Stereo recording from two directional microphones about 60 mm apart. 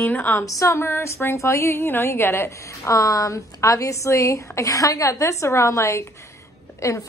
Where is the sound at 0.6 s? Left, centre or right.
Left.